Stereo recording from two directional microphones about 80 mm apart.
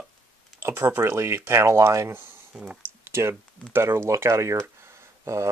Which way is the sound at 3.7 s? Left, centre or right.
Right.